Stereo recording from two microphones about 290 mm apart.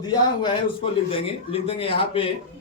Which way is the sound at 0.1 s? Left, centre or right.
Centre.